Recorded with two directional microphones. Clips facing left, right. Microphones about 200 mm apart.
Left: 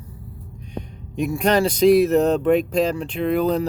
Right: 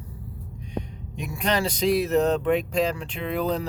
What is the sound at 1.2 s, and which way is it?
Speech, 45° left (ahead or behind).